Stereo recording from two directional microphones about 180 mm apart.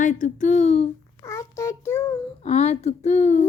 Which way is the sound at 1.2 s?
15° left (ahead or behind).